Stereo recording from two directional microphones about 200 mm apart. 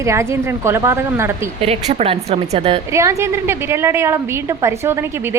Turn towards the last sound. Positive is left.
turn(degrees=-15)  # may be behind; listen again after turning